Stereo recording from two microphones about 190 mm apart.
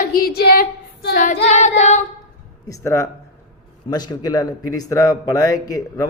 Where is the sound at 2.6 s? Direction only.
15° left (ahead or behind).